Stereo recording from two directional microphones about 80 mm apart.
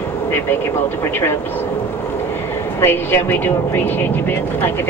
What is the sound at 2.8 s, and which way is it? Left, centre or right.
Speech, left.